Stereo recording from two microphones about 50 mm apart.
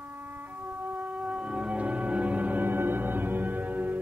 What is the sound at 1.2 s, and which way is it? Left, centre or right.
Music, centre.